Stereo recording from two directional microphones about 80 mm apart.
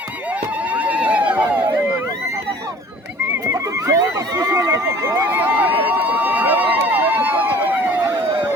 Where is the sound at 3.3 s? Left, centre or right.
Right.